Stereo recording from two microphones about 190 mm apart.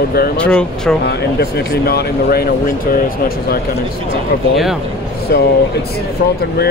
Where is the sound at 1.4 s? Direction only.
60° left (ahead or behind).